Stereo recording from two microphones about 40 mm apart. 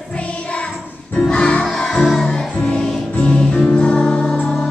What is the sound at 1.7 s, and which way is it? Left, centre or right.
Music, centre.